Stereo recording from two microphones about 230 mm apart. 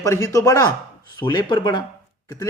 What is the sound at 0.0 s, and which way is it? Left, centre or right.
A man's voice, centre.